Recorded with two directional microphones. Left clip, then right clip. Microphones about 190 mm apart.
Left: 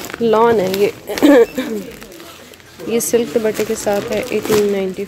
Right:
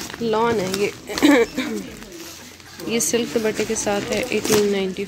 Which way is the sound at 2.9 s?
15° left (ahead or behind).